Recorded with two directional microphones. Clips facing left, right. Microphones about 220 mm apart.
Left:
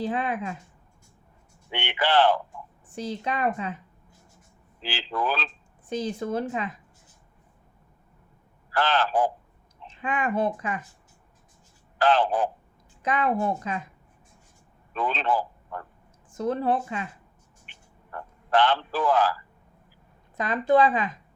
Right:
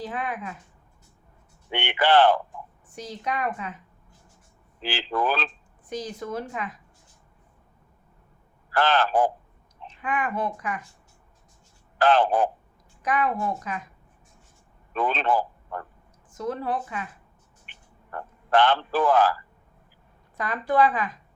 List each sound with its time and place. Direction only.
0.0 s a woman's voice: 30° left (ahead or behind)
1.7 s speech: 55° right (ahead or behind)
2.9 s a woman's voice: 30° left (ahead or behind)
4.8 s speech: 55° right (ahead or behind)
5.9 s a woman's voice: 30° left (ahead or behind)
8.7 s speech: 55° right (ahead or behind)
9.8 s speech: 25° left (ahead or behind)
11.9 s speech: 50° right (ahead or behind)
13.0 s a woman's voice: 25° left (ahead or behind)
14.9 s speech: 55° right (ahead or behind)
16.3 s a woman's voice: 30° left (ahead or behind)
17.7 s a sound: 55° right (ahead or behind)
20.3 s a woman's voice: 20° left (ahead or behind)